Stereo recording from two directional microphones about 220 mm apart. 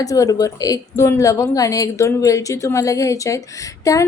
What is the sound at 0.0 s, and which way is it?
A woman's voice, 15° left (ahead or behind).